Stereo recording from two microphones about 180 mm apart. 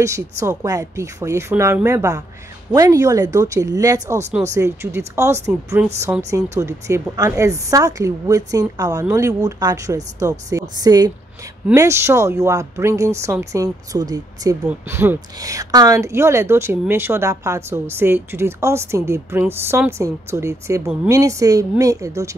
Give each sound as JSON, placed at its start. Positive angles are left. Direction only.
{"t": 0.0, "sound": "a woman's voice", "side_deg": -15}